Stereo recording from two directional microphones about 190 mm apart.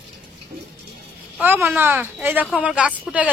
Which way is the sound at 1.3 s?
10° right (ahead or behind).